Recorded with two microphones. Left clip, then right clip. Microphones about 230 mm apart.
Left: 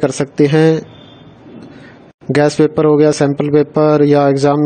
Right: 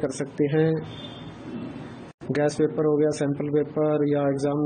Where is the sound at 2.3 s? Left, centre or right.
Left.